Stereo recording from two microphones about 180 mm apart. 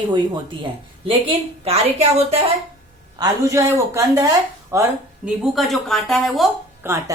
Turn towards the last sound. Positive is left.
turn(degrees=-10)  # may be behind; listen again after turning